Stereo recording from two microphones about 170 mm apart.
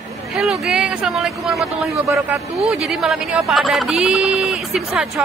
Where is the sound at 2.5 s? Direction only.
Centre (ahead or behind).